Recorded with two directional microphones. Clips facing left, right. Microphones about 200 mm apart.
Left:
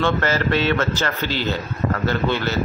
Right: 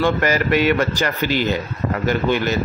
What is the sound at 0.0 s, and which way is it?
Speech, 15° right (ahead or behind).